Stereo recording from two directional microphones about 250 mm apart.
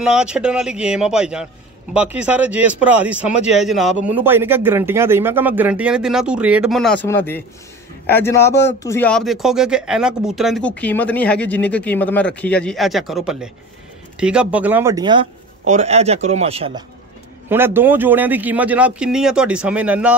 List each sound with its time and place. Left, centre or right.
0.0 s speech: centre
15.6 s a man's voice: right
17.5 s speech: centre